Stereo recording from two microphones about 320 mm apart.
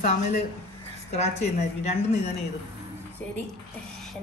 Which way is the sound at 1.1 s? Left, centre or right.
Centre.